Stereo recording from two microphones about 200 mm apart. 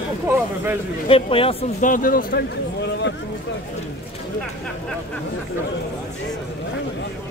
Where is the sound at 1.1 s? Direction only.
25° left (ahead or behind).